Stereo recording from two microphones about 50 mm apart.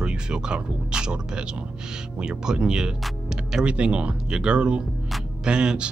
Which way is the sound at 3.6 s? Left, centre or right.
Right.